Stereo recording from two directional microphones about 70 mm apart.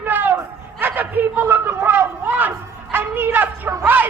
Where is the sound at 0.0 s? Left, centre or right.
Right.